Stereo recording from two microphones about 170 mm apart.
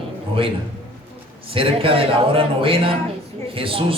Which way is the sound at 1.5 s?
30° right (ahead or behind).